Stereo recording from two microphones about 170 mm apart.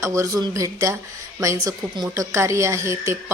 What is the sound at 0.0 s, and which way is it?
A woman's voice, 20° right (ahead or behind).